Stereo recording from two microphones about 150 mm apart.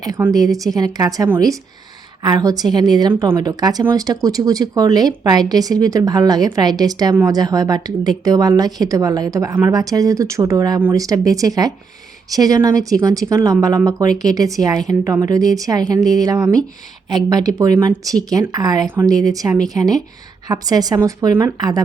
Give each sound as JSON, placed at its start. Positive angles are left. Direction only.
{"t": 0.3, "sound": "a woman's voice", "side_deg": -25}